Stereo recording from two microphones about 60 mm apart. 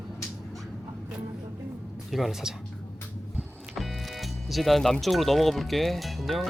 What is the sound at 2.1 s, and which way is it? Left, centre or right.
Speech, centre.